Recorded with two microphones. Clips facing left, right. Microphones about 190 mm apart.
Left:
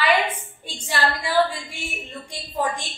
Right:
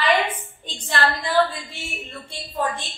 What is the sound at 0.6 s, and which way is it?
A woman's voice, 10° left (ahead or behind).